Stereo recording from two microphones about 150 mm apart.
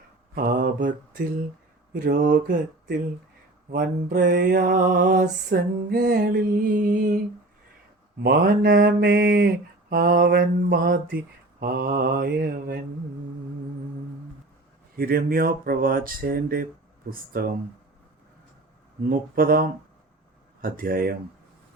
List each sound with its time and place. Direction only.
0.3 s mantra: 65° right (ahead or behind)
1.9 s mantra: 75° right (ahead or behind)
3.7 s mantra: 75° right (ahead or behind)
6.7 s mantra: 60° right (ahead or behind)
8.2 s mantra: 85° right
9.9 s mantra: 90° right
14.9 s mantra: 80° right
19.0 s mantra: 80° right